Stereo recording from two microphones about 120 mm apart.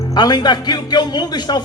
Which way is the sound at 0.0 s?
35° left (ahead or behind).